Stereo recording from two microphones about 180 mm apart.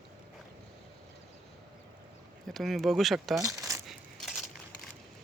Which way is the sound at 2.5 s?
Centre (ahead or behind).